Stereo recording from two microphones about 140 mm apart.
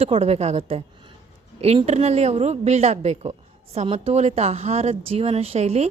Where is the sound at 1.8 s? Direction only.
50° right (ahead or behind).